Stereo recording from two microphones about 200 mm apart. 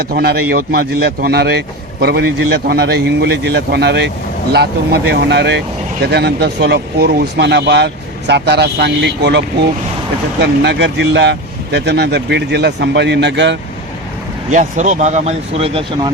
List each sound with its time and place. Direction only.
0.0 s a man's voice: 50° right (ahead or behind)
10.4 s a man's voice: 55° right (ahead or behind)
14.5 s speech: 35° right (ahead or behind)